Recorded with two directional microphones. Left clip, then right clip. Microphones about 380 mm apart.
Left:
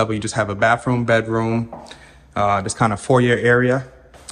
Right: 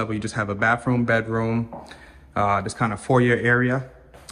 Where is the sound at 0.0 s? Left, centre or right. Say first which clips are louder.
Left 6 dB; centre.